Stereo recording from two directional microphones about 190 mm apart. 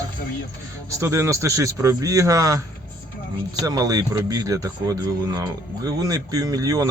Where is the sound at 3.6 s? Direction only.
20° right (ahead or behind).